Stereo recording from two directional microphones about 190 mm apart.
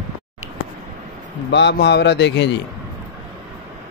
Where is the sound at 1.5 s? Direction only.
65° left (ahead or behind).